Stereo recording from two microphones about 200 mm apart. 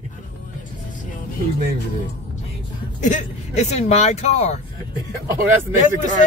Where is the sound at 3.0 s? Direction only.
35° left (ahead or behind).